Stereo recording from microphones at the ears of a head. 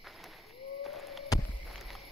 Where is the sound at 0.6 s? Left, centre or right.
Left.